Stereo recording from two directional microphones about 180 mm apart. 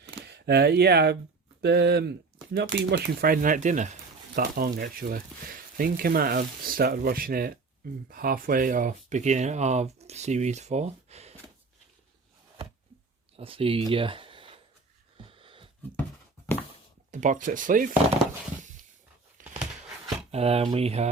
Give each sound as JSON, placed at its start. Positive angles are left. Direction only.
{"t": 0.3, "sound": "speech", "side_deg": -65}
{"t": 13.3, "sound": "speech", "side_deg": -30}
{"t": 13.9, "sound": "a sound", "side_deg": -30}
{"t": 15.2, "sound": "wheeze", "side_deg": -30}
{"t": 17.1, "sound": "speech", "side_deg": -45}
{"t": 19.4, "sound": "a sound", "side_deg": -45}
{"t": 20.3, "sound": "speech", "side_deg": -35}